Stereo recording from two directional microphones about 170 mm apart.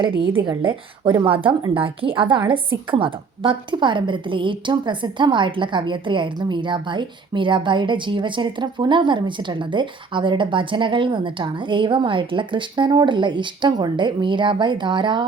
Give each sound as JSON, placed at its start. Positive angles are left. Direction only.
{"t": 0.4, "sound": "a woman's voice", "side_deg": -30}